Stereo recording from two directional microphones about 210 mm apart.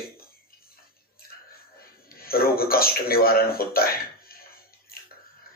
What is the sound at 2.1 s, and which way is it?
A man's voice, 45° left (ahead or behind).